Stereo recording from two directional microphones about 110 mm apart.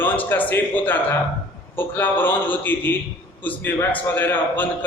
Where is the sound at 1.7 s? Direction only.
20° left (ahead or behind).